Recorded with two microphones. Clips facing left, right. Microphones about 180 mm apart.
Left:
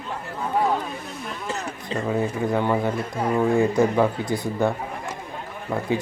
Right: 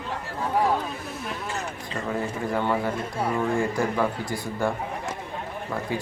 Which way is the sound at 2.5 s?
20° left (ahead or behind).